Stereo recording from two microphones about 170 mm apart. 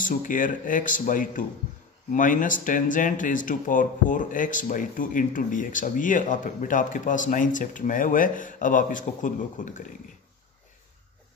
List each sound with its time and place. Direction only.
0.0 s speech: 50° left (ahead or behind)